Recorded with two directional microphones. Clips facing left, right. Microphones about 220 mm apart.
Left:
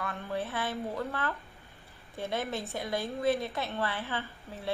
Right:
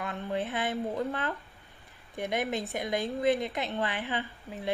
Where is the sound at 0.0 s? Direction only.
20° right (ahead or behind).